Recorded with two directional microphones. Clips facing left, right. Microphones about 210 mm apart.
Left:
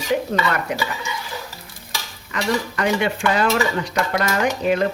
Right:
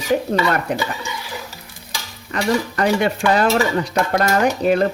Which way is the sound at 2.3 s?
35° right (ahead or behind).